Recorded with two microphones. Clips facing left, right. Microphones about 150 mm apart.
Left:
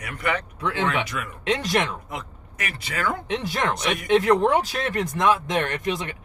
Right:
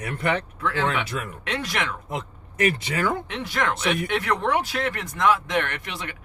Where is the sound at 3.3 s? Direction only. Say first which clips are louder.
Left 1 dB; 20° left (ahead or behind).